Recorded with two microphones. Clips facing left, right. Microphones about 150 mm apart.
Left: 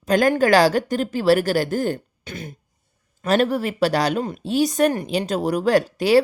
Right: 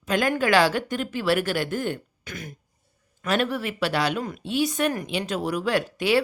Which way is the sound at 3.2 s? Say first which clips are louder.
Left 6 dB; 40° left (ahead or behind).